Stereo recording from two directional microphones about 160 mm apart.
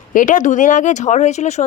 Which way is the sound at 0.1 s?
55° left (ahead or behind).